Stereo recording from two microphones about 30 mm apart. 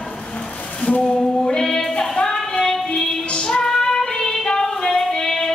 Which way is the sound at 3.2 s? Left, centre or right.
Left.